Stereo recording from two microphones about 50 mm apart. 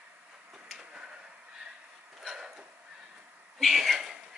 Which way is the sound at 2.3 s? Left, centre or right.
Centre.